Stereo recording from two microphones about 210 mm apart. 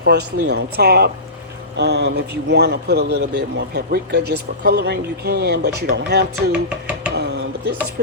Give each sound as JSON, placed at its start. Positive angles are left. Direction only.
{"t": 0.0, "sound": "speech", "side_deg": -50}
{"t": 6.5, "sound": "speech", "side_deg": -5}
{"t": 7.1, "sound": "a sound", "side_deg": -50}